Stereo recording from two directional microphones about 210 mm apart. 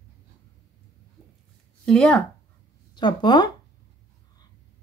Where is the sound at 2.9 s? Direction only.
20° left (ahead or behind).